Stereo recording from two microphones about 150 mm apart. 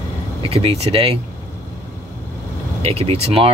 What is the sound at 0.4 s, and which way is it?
Speech, 40° right (ahead or behind).